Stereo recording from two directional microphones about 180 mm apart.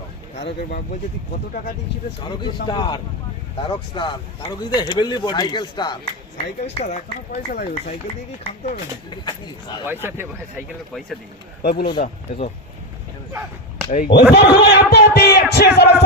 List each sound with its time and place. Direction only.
2.6 s speech: 25° left (ahead or behind); by 7.6 s 40° left (ahead or behind)
8.7 s speech: 25° left (ahead or behind)
9.8 s speech: 10° right (ahead or behind)
11.6 s speech: 60° left (ahead or behind)
14.1 s a man's voice: 65° left (ahead or behind)